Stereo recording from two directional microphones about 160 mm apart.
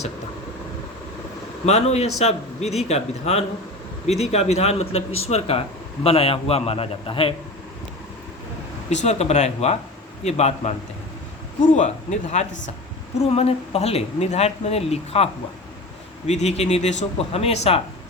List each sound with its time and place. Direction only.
1.6 s speech: 40° left (ahead or behind)
8.9 s speech: 45° left (ahead or behind)
11.8 s speech: 45° left (ahead or behind)